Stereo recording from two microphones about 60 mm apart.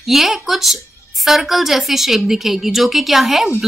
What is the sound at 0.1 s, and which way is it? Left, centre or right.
Speech, centre.